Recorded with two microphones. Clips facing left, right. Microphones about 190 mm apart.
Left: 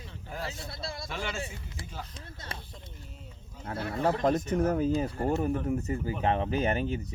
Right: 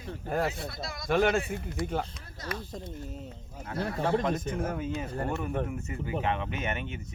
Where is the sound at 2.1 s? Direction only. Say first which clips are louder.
Right 5 dB; 30° left (ahead or behind).